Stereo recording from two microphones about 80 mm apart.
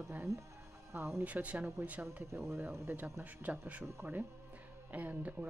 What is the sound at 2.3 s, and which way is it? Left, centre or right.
Speech, right.